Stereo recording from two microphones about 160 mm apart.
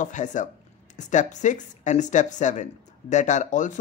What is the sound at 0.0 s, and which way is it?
Speech, 50° left (ahead or behind).